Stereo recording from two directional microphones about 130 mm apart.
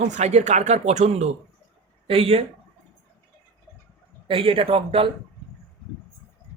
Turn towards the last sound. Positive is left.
turn(degrees=-45)  # may be behind; listen again after turning